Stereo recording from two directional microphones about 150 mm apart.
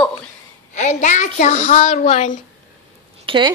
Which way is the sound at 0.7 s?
55° left (ahead or behind).